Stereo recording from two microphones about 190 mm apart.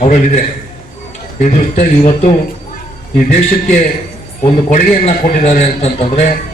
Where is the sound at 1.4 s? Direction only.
40° left (ahead or behind).